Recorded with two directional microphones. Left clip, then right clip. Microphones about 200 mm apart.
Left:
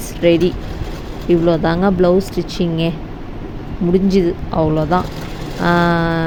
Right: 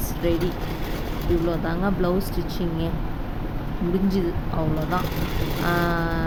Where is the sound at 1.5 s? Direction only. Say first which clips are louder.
Left 10 dB; 35° left (ahead or behind).